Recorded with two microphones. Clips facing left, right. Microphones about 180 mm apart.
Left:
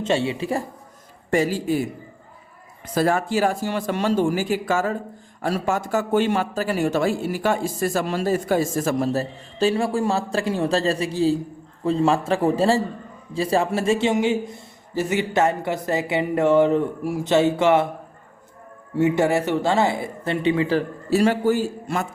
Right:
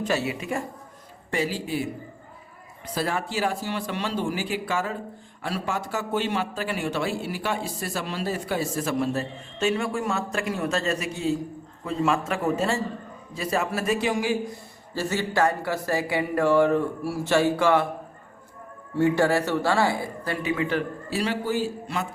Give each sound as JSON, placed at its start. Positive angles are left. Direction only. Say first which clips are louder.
{"t": 0.0, "sound": "a man's voice", "louder": "left 4 dB", "side_deg": 25}
{"t": 1.3, "sound": "a man's voice", "louder": "left 6 dB", "side_deg": 45}
{"t": 2.8, "sound": "a man's voice", "louder": "left 7 dB", "side_deg": 45}
{"t": 18.9, "sound": "a man's voice", "louder": "left 2 dB", "side_deg": 20}